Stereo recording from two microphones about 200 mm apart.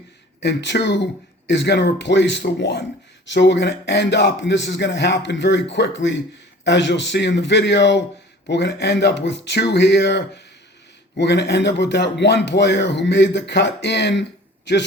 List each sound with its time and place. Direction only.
0.3 s speech: 60° left (ahead or behind)